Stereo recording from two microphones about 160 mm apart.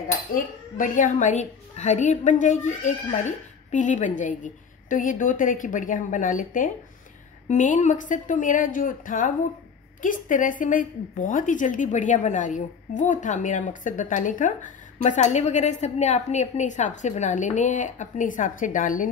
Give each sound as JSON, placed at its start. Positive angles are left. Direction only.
{"t": 0.3, "sound": "a woman's voice", "side_deg": 55}